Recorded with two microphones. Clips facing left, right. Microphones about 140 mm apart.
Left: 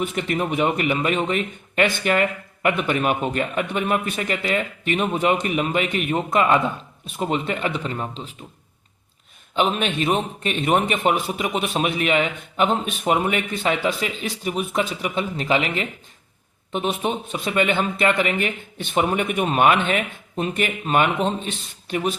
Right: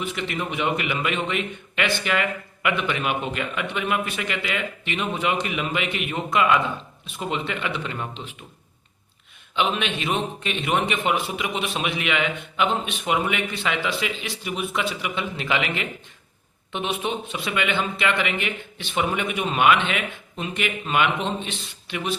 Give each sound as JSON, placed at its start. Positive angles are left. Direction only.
{"t": 0.0, "sound": "a man's voice", "side_deg": 45}
{"t": 9.6, "sound": "a man's voice", "side_deg": 40}